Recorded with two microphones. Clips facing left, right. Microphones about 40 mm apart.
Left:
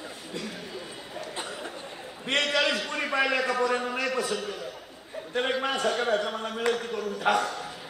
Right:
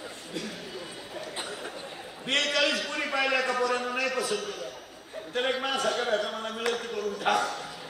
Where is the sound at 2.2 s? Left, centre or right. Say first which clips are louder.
Left 1 dB; centre.